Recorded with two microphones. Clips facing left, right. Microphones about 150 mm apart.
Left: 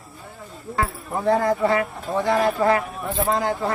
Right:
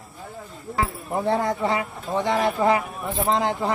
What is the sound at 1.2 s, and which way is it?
Speech, 25° right (ahead or behind).